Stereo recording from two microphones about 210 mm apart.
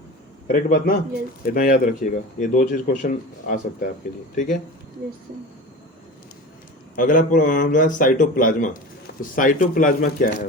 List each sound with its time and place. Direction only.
0.4 s a man's voice: 45° left (ahead or behind)
6.9 s speech: 40° left (ahead or behind)